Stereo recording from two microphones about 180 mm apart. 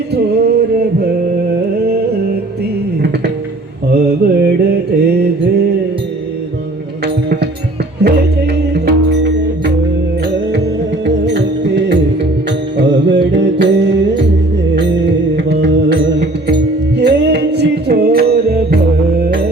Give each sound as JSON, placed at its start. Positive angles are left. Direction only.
{"t": 0.1, "sound": "a sound", "side_deg": -65}
{"t": 3.9, "sound": "mantra", "side_deg": -60}
{"t": 8.0, "sound": "music", "side_deg": -65}
{"t": 11.0, "sound": "music", "side_deg": -75}
{"t": 15.5, "sound": "music", "side_deg": -70}